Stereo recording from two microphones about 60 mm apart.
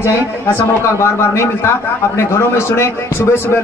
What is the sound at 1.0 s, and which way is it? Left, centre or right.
Speech, left.